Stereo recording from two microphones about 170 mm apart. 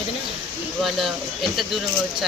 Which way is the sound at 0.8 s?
Centre (ahead or behind).